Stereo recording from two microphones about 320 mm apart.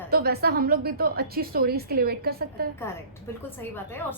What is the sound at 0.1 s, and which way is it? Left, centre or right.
A woman's voice, right.